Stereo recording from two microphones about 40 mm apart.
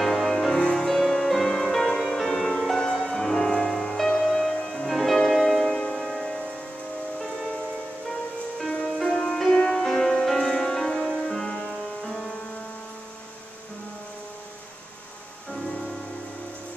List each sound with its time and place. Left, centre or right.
0.0 s music: centre
8.8 s music: centre
12.0 s music: centre